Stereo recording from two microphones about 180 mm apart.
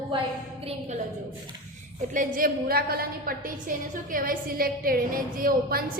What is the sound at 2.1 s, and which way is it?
A woman's voice, 50° right (ahead or behind).